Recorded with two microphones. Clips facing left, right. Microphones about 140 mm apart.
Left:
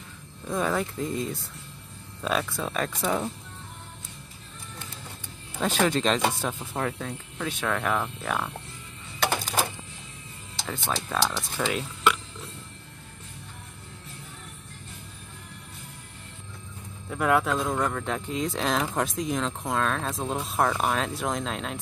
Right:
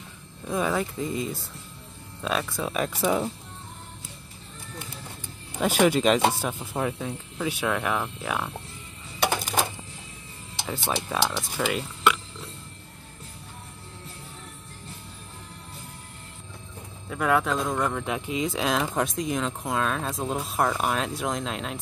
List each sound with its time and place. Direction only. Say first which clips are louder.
0.5 s speech: right 1 dB; 5° right (ahead or behind)
5.5 s speech: right 3 dB; 10° right (ahead or behind)
10.6 s speech: right 2 dB; 10° right (ahead or behind)
17.1 s speech: even; centre (ahead or behind)